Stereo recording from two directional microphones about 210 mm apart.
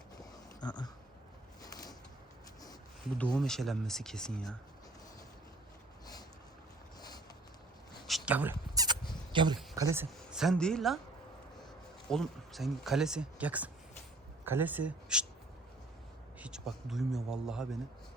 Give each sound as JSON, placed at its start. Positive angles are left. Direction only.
{"t": 0.2, "sound": "a sound", "side_deg": 20}
{"t": 3.3, "sound": "speech", "side_deg": 0}
{"t": 8.0, "sound": "a sound", "side_deg": -5}
{"t": 9.3, "sound": "speech", "side_deg": -20}
{"t": 10.2, "sound": "speech", "side_deg": 0}
{"t": 12.0, "sound": "speech", "side_deg": 0}
{"t": 16.4, "sound": "speech", "side_deg": 0}